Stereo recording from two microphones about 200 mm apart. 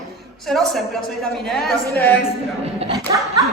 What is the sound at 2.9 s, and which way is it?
Speech, 20° right (ahead or behind).